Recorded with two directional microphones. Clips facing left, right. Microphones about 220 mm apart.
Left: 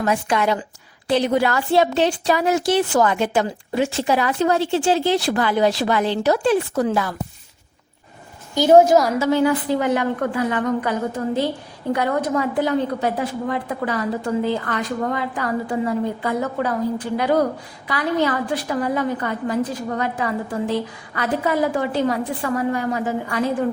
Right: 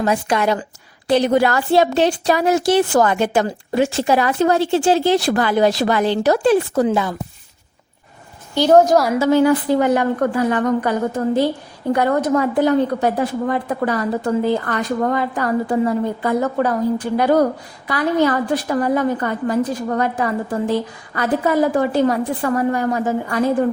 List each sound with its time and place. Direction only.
0.0 s a woman's voice: 35° right (ahead or behind)
6.8 s speech: 20° right (ahead or behind)
8.6 s a woman's voice: 10° left (ahead or behind)
9.8 s a woman's voice: 40° right (ahead or behind)
11.9 s a woman's voice: 45° right (ahead or behind)